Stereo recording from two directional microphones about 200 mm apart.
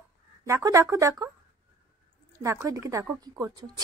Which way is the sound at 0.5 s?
15° right (ahead or behind).